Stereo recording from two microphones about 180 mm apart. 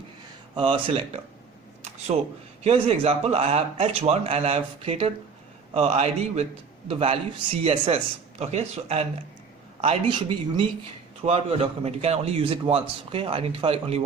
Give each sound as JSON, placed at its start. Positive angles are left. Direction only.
{"t": 0.5, "sound": "a man's voice", "side_deg": -30}